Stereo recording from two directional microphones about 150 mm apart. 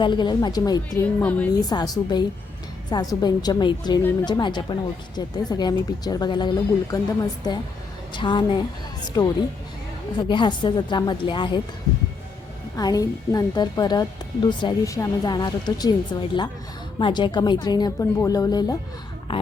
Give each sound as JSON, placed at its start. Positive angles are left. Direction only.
{"t": 0.0, "sound": "speech", "side_deg": 30}
{"t": 0.9, "sound": "speech", "side_deg": 10}
{"t": 1.6, "sound": "a woman's voice", "side_deg": 25}
{"t": 12.7, "sound": "speech", "side_deg": 25}
{"t": 19.3, "sound": "a woman's voice", "side_deg": 35}